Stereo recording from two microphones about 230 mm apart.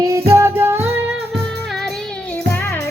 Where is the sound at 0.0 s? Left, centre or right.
Centre.